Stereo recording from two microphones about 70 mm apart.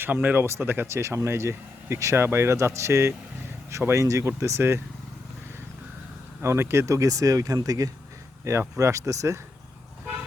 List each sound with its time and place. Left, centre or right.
0.0 s speech: right
0.4 s speech: right
0.9 s speech: right
6.4 s speech: right
8.8 s speech: right